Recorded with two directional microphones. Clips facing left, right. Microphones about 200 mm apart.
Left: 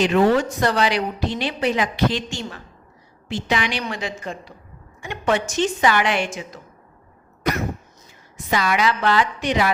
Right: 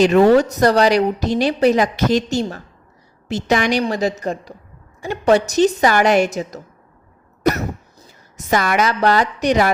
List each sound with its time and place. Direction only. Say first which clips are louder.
0.0 s a woman's voice: right 5 dB; 40° right (ahead or behind)
8.4 s a woman's voice: right 4 dB; 45° right (ahead or behind)